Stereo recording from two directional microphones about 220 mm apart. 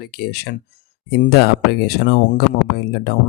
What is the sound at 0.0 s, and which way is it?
Speech, 45° left (ahead or behind).